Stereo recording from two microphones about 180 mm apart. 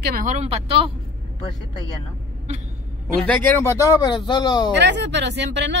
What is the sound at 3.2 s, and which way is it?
Speech, 5° left (ahead or behind).